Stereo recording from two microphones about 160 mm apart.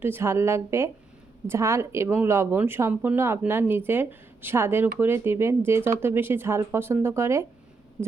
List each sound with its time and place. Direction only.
0.0 s speech: 15° right (ahead or behind)